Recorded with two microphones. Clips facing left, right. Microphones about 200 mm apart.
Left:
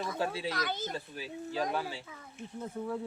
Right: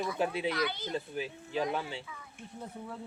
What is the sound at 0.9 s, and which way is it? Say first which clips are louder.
Speech: right 4 dB; 20° right (ahead or behind).